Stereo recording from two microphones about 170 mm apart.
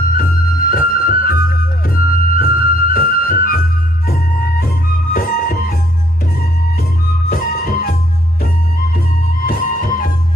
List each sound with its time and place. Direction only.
0.2 s music: 60° left (ahead or behind)
4.6 s music: 55° left (ahead or behind)
7.3 s music: 60° left (ahead or behind)
9.5 s music: 55° left (ahead or behind)